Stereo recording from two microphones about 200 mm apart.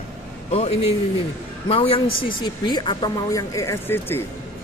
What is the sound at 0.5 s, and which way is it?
A man's voice, 30° left (ahead or behind).